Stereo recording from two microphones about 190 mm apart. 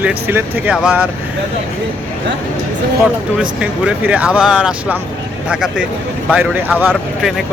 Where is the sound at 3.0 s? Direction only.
5° right (ahead or behind).